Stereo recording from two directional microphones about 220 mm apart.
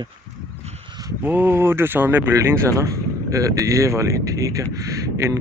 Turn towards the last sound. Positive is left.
turn(degrees=-15)  # may be behind; listen again after turning